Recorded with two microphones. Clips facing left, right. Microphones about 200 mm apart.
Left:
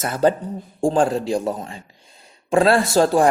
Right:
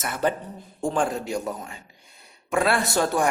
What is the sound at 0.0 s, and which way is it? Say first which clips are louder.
A man's voice: left 7 dB; 30° left (ahead or behind).